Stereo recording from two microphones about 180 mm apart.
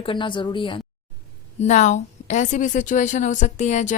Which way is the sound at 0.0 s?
25° left (ahead or behind).